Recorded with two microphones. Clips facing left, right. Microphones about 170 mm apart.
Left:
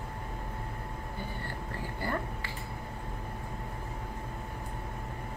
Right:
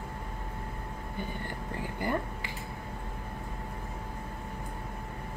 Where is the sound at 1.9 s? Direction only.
15° right (ahead or behind).